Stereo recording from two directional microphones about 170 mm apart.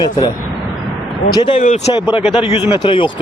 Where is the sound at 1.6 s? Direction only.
40° left (ahead or behind).